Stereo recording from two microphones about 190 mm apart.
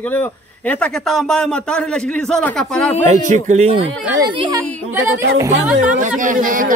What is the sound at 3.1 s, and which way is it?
Speech, 40° right (ahead or behind).